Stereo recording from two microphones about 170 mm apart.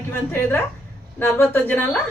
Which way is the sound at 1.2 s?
15° left (ahead or behind).